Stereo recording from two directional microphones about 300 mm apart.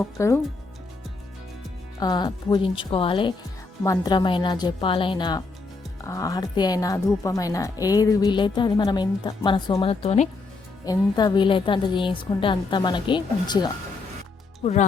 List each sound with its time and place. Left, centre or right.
0.0 s speech: centre
2.0 s speech: centre